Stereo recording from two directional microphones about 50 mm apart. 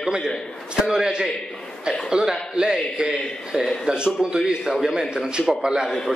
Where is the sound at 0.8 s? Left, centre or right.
Centre.